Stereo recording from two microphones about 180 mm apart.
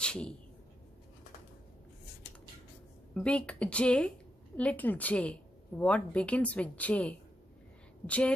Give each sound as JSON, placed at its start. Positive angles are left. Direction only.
{"t": 0.0, "sound": "speech", "side_deg": 5}
{"t": 3.2, "sound": "a woman's voice", "side_deg": 5}